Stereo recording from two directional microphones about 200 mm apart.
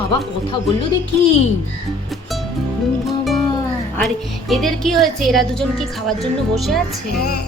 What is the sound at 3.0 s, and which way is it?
Music, centre (ahead or behind).